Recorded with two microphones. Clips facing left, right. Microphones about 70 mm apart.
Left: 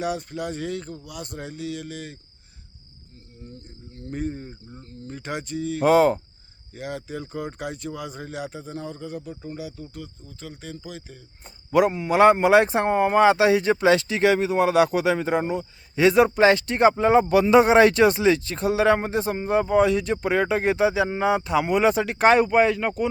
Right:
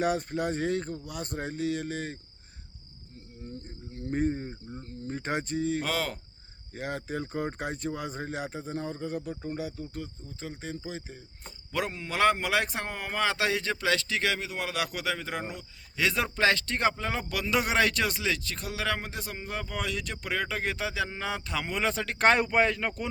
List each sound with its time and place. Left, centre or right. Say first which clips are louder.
0.0 s speech: even; right
3.9 s speech: right 1 dB; right
5.8 s speech: left 14 dB; left
6.7 s speech: left 1 dB; right
9.8 s speech: even; right
11.4 s speech: left 13 dB; centre